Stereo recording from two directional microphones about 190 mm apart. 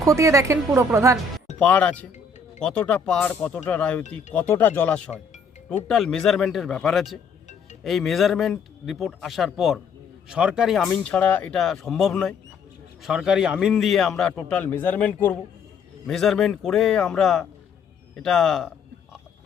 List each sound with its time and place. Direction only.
0.0 s a woman's voice: 15° right (ahead or behind)
1.5 s a man's voice: 5° left (ahead or behind)